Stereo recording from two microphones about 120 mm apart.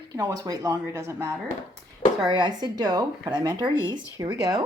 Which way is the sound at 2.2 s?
40° right (ahead or behind).